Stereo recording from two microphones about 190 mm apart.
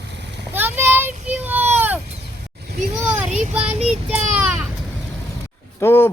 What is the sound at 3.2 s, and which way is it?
Child singing, 40° right (ahead or behind).